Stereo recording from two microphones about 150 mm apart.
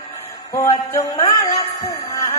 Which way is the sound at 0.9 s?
20° left (ahead or behind).